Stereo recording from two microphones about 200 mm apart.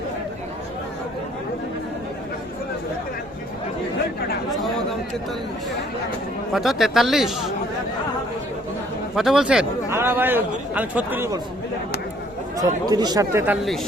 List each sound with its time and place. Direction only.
6.5 s speech: centre (ahead or behind)
9.1 s speech: centre (ahead or behind)
12.5 s speech: 20° right (ahead or behind)